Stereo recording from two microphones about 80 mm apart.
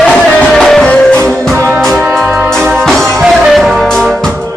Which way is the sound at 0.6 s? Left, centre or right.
Centre.